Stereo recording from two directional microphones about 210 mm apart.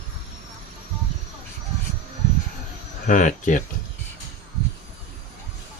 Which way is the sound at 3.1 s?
35° left (ahead or behind).